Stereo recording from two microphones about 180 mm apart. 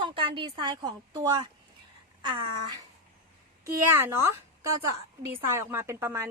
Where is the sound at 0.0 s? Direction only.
25° right (ahead or behind).